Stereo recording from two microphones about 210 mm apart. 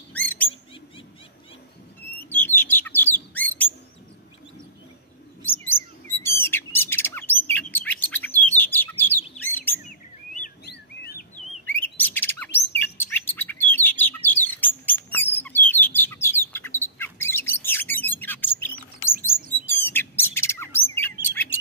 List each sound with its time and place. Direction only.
0.1 s rodents: 10° left (ahead or behind)
2.0 s bird: 10° left (ahead or behind)
5.6 s bird: 10° left (ahead or behind)
7.4 s chirp: 10° left (ahead or behind)
9.8 s chirp: 35° left (ahead or behind)
10.6 s chirp: 50° left (ahead or behind)
11.7 s bird: 10° left (ahead or behind)